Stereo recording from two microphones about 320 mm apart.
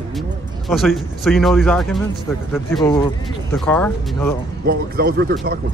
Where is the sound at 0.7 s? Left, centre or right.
Centre.